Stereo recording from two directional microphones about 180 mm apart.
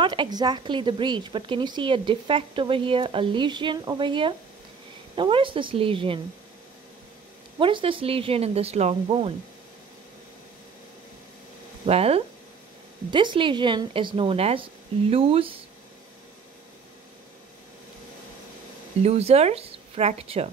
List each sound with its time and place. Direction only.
0.0 s a woman's voice: 25° right (ahead or behind)
7.5 s speech: 30° right (ahead or behind)
11.8 s a woman's voice: 35° right (ahead or behind)
19.0 s speech: 35° right (ahead or behind)